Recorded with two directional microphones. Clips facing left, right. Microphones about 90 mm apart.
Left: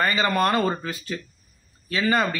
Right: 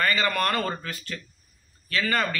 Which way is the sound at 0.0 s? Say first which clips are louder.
Left 3 dB; 20° left (ahead or behind).